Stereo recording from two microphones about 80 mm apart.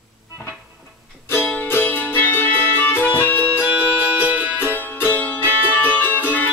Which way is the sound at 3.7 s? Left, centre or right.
Centre.